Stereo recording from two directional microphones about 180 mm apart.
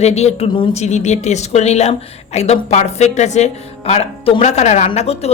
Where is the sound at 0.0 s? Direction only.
35° left (ahead or behind).